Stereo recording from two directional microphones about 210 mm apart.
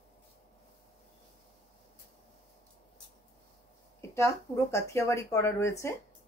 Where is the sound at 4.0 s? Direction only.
15° left (ahead or behind).